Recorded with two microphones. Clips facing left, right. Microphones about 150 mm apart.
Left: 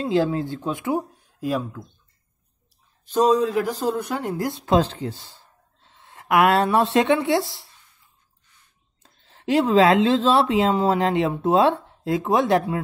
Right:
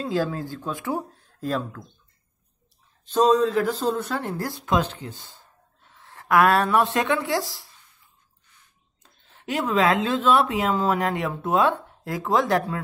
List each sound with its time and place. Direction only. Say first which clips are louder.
0.0 s speech: left 4 dB; 20° left (ahead or behind)
3.1 s a woman's voice: even; 10° left (ahead or behind)
9.0 s speech: left 8 dB; 30° left (ahead or behind)